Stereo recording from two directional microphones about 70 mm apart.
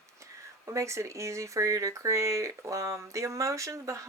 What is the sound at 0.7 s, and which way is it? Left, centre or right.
Speech, right.